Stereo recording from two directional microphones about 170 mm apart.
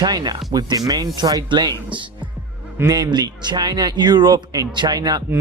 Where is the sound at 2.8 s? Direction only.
20° right (ahead or behind).